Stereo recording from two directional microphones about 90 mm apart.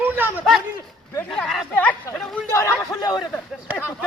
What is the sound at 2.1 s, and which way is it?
Speech, 35° left (ahead or behind).